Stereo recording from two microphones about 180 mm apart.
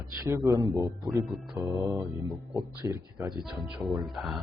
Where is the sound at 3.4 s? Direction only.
Centre (ahead or behind).